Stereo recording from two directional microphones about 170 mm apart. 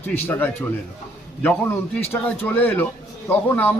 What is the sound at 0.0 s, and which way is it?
A man's voice, 10° left (ahead or behind).